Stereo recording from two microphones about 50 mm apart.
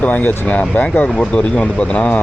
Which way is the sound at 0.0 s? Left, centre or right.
Left.